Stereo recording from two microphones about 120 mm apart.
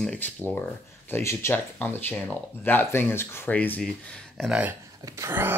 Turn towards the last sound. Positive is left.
turn(degrees=-20)  # may be behind; listen again after turning